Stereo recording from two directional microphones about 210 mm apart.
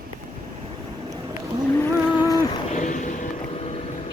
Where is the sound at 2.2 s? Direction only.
20° left (ahead or behind).